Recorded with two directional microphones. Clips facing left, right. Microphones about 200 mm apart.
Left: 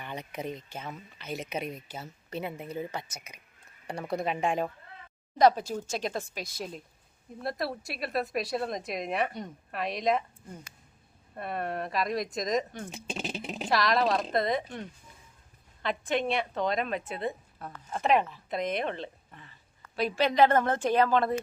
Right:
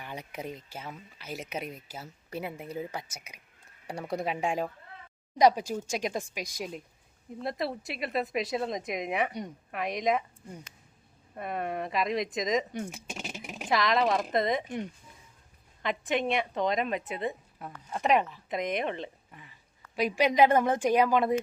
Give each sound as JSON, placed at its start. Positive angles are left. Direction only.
{"t": 0.0, "sound": "speech", "side_deg": -10}
{"t": 15.8, "sound": "speech", "side_deg": -15}